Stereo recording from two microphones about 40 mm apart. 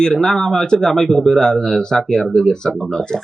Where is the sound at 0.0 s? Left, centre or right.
Centre.